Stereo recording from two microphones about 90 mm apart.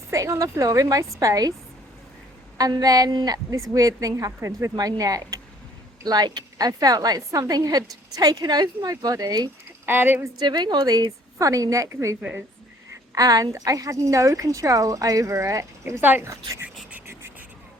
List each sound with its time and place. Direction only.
0.1 s speech: 35° right (ahead or behind)
2.6 s a woman's voice: 45° right (ahead or behind)
9.8 s a sound: 20° right (ahead or behind)
10.3 s a woman's voice: 55° right (ahead or behind)
11.3 s speech: 40° right (ahead or behind)
13.1 s speech: 40° right (ahead or behind); by 16.2 s 20° right (ahead or behind)